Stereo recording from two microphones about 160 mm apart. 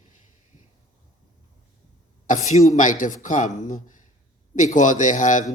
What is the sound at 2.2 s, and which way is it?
Speech, 50° left (ahead or behind).